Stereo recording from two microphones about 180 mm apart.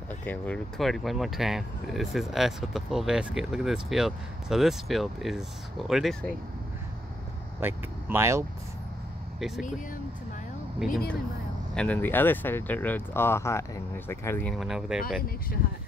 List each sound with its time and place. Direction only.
0.1 s speech: 10° left (ahead or behind)
7.6 s speech: 15° right (ahead or behind)
10.8 s speech: centre (ahead or behind)
14.5 s speech: centre (ahead or behind)
15.2 s speech: 55° left (ahead or behind)